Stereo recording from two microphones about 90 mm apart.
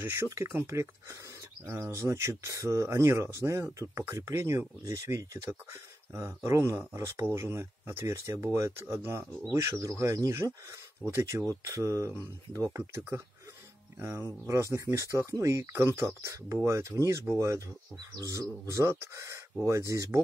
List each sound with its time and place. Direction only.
0.0 s speech: 30° right (ahead or behind)